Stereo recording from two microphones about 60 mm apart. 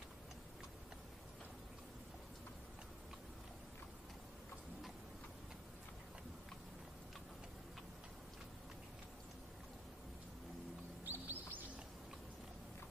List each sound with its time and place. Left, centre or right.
11.1 s bird: right